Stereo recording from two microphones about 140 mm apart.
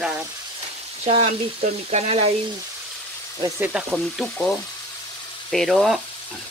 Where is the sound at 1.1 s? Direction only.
55° right (ahead or behind).